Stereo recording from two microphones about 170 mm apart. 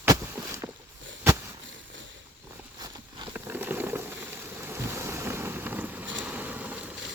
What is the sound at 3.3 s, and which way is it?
Boat, 10° right (ahead or behind).